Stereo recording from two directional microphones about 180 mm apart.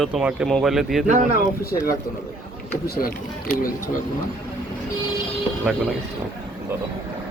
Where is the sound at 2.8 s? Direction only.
55° left (ahead or behind).